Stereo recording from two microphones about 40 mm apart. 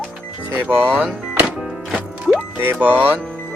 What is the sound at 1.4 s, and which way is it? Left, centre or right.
Music, centre.